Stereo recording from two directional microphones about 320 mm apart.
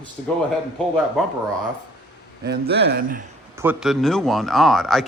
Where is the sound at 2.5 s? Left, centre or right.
Right.